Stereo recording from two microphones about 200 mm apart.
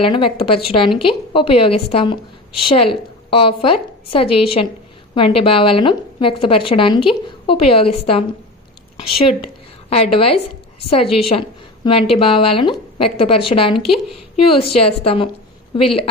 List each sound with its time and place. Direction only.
0.0 s a woman's voice: 25° left (ahead or behind)
13.7 s speech: centre (ahead or behind)
14.3 s a woman's voice: 25° left (ahead or behind)